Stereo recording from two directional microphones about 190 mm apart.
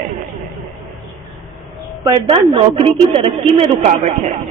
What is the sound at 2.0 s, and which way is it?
A woman's voice, 20° right (ahead or behind).